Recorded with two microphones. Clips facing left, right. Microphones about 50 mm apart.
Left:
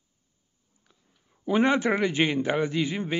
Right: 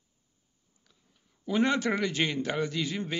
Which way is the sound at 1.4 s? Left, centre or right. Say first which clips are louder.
Left 4 dB; left.